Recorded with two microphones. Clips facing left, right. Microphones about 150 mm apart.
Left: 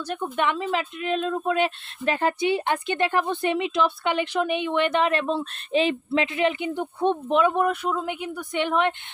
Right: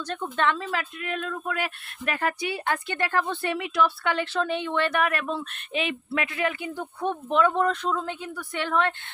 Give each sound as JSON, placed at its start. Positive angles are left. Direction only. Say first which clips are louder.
{"t": 0.0, "sound": "speech", "louder": "left 1 dB", "side_deg": 15}